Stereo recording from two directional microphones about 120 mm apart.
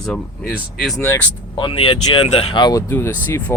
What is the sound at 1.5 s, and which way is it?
Speech, 45° left (ahead or behind).